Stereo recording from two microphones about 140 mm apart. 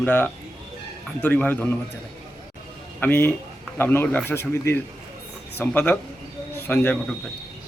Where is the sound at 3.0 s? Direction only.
15° left (ahead or behind).